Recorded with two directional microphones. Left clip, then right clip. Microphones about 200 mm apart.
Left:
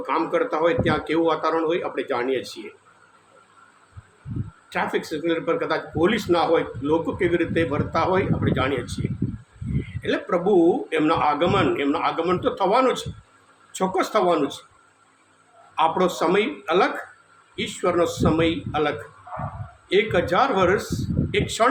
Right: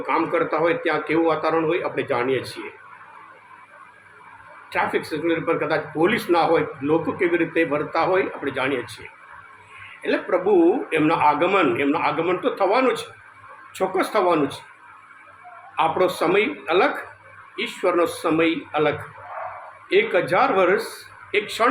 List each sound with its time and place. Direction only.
0.0 s speech: 5° left (ahead or behind)
4.7 s speech: 5° left (ahead or behind)
10.0 s speech: 5° left (ahead or behind)
15.7 s speech: 5° left (ahead or behind)